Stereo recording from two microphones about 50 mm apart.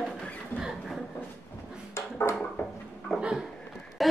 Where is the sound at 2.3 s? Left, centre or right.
Left.